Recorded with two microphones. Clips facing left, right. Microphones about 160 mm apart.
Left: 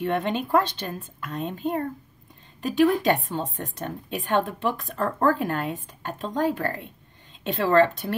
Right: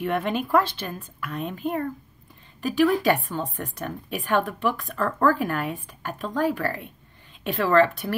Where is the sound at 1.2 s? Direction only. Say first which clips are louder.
Even; 25° left (ahead or behind).